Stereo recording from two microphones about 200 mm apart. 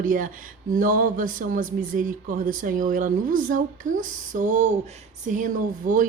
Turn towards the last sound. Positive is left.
turn(degrees=-40)  # may be behind; listen again after turning